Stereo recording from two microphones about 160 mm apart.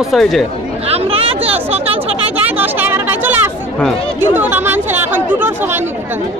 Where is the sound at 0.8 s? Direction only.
40° right (ahead or behind).